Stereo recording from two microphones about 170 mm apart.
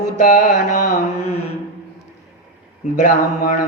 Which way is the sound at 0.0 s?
50° left (ahead or behind).